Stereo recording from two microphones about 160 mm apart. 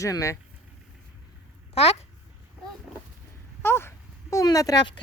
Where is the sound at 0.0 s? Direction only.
20° left (ahead or behind).